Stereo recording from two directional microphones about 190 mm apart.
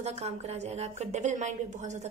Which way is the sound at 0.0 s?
35° right (ahead or behind).